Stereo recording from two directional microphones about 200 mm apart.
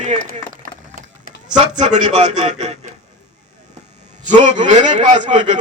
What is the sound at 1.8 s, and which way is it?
Speech, 35° right (ahead or behind).